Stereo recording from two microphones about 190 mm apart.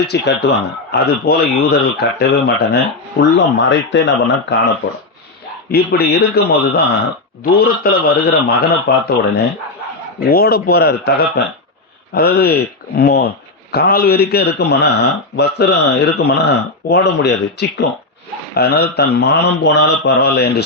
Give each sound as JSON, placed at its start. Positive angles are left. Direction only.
{"t": 0.0, "sound": "speech", "side_deg": 60}
{"t": 5.7, "sound": "a man's voice", "side_deg": 55}
{"t": 10.2, "sound": "a man's voice", "side_deg": 55}
{"t": 12.1, "sound": "speech", "side_deg": 55}